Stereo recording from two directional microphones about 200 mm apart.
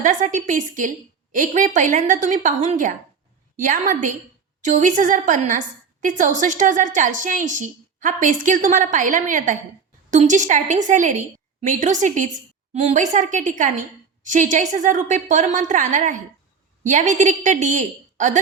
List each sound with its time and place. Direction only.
0.0 s a woman's voice: 40° right (ahead or behind)